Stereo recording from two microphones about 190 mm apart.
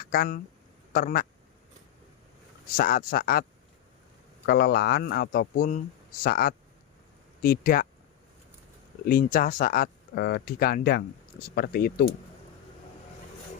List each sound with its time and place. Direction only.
0.0 s speech: 50° left (ahead or behind)
2.7 s speech: 50° left (ahead or behind)
4.4 s speech: 55° left (ahead or behind)
9.0 s speech: 50° left (ahead or behind)